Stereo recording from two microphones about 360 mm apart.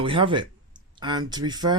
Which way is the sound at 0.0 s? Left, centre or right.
Centre.